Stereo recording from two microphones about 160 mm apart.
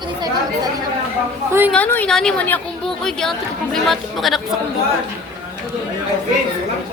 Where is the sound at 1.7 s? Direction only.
10° left (ahead or behind).